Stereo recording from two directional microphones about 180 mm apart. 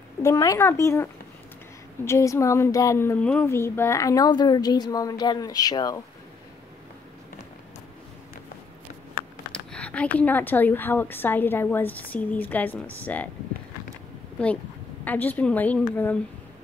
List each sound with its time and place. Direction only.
0.2 s speech: 20° left (ahead or behind)
9.5 s speech: 5° left (ahead or behind)
14.4 s speech: 5° left (ahead or behind)